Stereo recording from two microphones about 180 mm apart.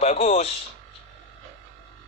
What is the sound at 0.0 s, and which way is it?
Speech, 35° left (ahead or behind).